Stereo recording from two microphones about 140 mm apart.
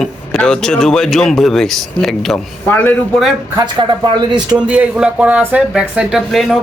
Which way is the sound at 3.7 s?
35° right (ahead or behind).